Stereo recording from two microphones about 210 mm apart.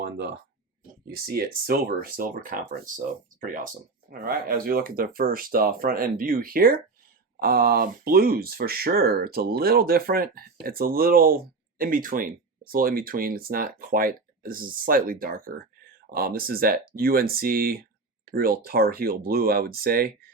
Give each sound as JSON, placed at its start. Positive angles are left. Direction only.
{"t": 1.0, "sound": "speech", "side_deg": -45}